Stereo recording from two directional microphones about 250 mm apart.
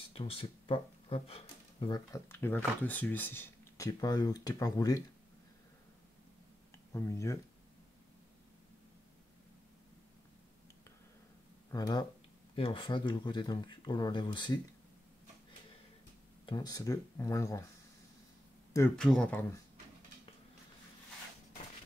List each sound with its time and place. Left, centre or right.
0.1 s speech: left
6.9 s speech: centre
11.7 s speech: centre
16.4 s speech: centre
18.7 s speech: centre